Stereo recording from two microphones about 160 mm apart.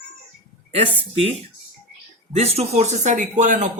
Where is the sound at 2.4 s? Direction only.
40° right (ahead or behind).